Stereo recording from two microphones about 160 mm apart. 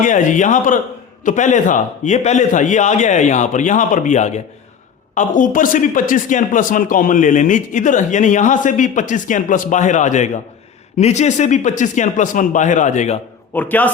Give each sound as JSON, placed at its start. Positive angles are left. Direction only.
{"t": 0.0, "sound": "speech", "side_deg": 50}
{"t": 13.5, "sound": "a man's voice", "side_deg": 10}